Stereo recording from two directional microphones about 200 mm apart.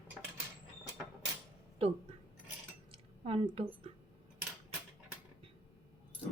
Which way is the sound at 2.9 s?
25° right (ahead or behind).